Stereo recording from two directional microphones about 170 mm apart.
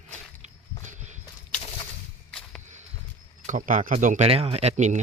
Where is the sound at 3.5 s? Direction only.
50° right (ahead or behind).